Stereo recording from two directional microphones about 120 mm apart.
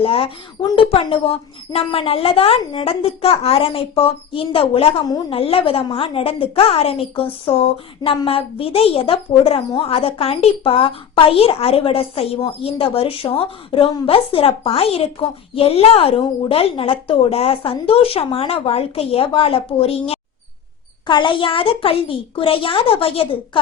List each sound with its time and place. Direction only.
0.0 s a woman's voice: 50° left (ahead or behind)
21.1 s a woman's voice: 40° left (ahead or behind)